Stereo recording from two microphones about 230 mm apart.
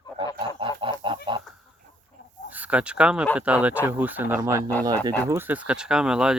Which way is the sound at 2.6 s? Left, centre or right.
Centre.